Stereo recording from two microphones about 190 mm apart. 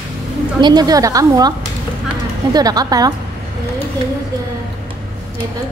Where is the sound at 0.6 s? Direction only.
20° right (ahead or behind).